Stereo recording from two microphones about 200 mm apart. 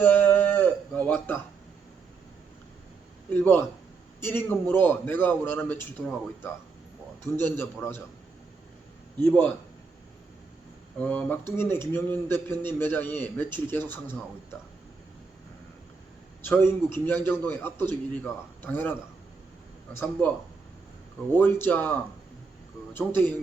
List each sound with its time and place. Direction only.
0.0 s a sound: 10° left (ahead or behind)
3.3 s a man's voice: 10° left (ahead or behind)
9.2 s a man's voice: 5° left (ahead or behind)
11.0 s a man's voice: 10° left (ahead or behind)
16.4 s a man's voice: 10° left (ahead or behind)
21.3 s a man's voice: 10° left (ahead or behind)